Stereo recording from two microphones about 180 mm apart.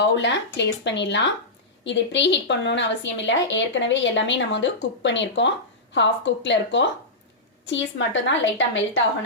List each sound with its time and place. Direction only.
0.0 s a woman's voice: 80° left